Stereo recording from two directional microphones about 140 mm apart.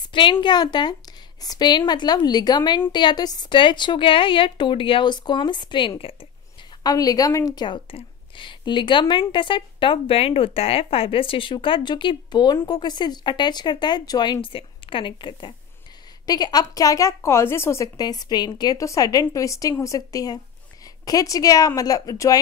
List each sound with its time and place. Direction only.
0.1 s a woman's voice: 35° left (ahead or behind)
6.8 s a woman's voice: 25° left (ahead or behind)